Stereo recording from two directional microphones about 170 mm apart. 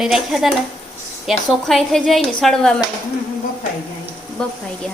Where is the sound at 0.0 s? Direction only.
Centre (ahead or behind).